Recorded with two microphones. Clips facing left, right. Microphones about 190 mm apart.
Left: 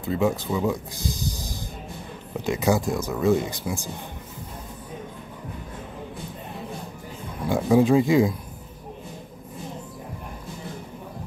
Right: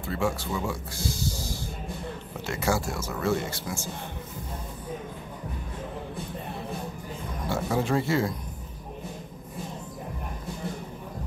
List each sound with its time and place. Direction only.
0.0 s speech: 20° left (ahead or behind)
7.4 s speech: 15° left (ahead or behind)